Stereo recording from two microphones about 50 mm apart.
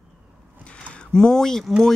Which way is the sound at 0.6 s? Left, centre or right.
Left.